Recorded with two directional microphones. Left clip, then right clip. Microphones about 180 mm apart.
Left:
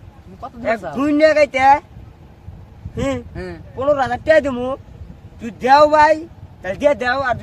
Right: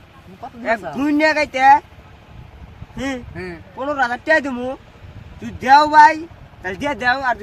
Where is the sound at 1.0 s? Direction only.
40° left (ahead or behind).